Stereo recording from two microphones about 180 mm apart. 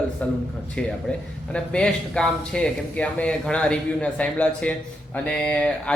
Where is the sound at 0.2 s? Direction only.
5° left (ahead or behind).